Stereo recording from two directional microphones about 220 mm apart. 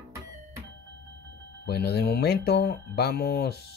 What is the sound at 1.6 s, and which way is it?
Speech, 45° left (ahead or behind).